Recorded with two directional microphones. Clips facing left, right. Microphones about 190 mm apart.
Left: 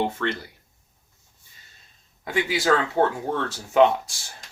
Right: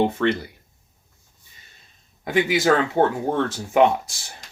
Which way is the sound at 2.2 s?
20° right (ahead or behind).